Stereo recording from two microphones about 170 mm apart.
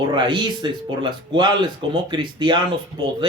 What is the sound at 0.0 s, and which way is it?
Speech, 25° right (ahead or behind).